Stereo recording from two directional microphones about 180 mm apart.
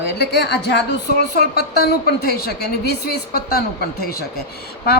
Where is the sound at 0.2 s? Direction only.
65° left (ahead or behind).